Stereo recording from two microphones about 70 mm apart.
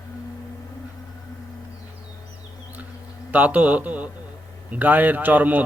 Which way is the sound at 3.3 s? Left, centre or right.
Right.